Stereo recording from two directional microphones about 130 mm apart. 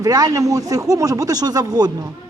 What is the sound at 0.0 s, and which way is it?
A man's voice, 30° right (ahead or behind).